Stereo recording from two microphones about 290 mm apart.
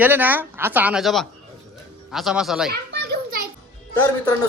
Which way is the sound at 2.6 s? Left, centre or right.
Right.